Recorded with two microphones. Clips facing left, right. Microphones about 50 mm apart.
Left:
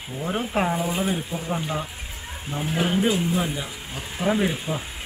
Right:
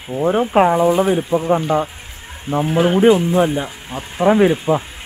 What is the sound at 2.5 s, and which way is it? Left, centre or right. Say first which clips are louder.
Speech: right 12 dB; right.